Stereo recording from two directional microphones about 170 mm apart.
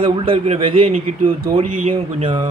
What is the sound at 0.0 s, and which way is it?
A man's voice, 35° right (ahead or behind).